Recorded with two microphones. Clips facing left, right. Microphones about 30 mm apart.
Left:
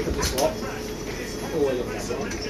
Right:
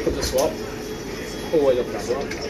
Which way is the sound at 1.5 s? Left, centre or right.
Right.